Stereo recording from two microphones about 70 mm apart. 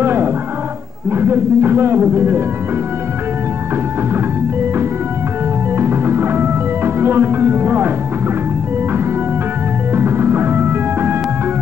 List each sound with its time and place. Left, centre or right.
0.0 s music: right
1.1 s speech: right
5.8 s music: right
9.9 s music: right